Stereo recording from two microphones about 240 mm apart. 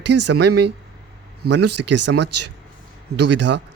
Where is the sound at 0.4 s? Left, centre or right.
Right.